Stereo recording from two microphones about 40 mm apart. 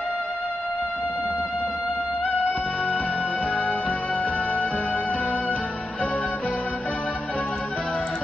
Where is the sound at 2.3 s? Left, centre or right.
Left.